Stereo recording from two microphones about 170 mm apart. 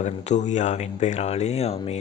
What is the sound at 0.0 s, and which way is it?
Speech, 45° left (ahead or behind).